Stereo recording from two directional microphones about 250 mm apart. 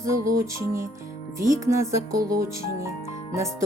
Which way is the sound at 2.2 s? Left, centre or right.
Right.